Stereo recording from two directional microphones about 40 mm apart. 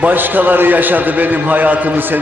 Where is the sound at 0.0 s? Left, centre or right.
Right.